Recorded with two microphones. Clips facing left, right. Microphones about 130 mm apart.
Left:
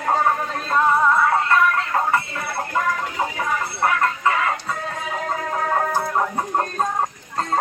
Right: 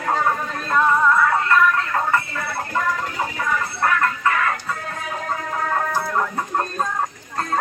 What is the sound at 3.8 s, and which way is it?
Music, 20° left (ahead or behind).